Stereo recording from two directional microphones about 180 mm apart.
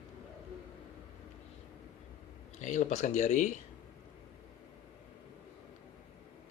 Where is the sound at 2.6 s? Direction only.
40° left (ahead or behind).